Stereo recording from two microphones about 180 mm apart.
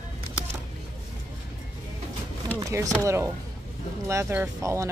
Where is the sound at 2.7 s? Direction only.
15° right (ahead or behind).